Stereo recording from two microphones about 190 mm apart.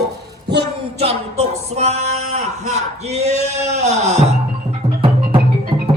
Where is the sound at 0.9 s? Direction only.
30° right (ahead or behind).